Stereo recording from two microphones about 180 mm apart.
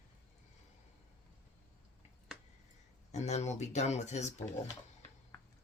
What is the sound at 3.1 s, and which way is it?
Speech, 40° left (ahead or behind).